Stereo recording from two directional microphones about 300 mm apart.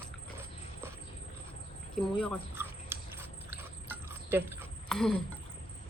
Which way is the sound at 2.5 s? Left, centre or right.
Centre.